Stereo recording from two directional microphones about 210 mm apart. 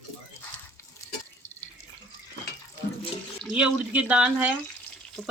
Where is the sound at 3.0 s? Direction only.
25° left (ahead or behind).